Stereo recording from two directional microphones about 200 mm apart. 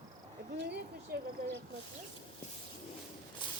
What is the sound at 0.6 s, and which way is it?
Speech, 55° right (ahead or behind).